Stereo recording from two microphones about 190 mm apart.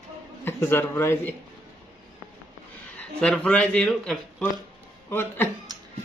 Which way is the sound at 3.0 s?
5° left (ahead or behind).